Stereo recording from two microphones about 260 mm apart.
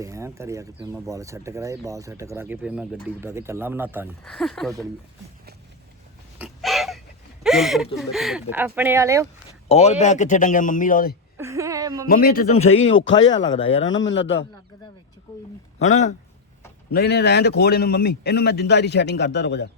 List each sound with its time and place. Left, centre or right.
0.0 s speech: centre
6.4 s a sound: centre
7.9 s speech: centre
9.6 s speech: left
11.3 s a sound: centre
12.0 s speech: left
13.1 s a man's voice: left
13.4 s speech: centre
13.8 s a man's voice: left
15.3 s speech: centre
15.8 s speech: left
16.9 s speech: left